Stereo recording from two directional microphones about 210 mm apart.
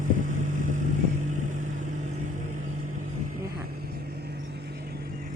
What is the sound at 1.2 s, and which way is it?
Vehicle, 35° right (ahead or behind).